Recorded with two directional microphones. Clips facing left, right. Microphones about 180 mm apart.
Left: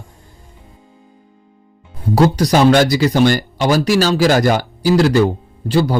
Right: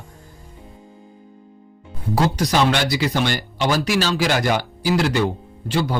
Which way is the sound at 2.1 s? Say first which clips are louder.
Left 6 dB; 35° left (ahead or behind).